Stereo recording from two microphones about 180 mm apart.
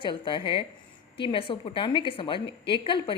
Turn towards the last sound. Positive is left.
turn(degrees=30)  # may be behind; listen again after turning